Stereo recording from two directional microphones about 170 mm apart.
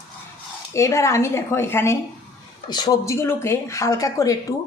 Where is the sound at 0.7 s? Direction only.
15° left (ahead or behind).